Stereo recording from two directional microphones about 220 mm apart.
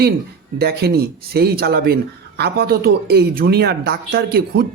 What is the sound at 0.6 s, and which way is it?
Speech, 45° right (ahead or behind).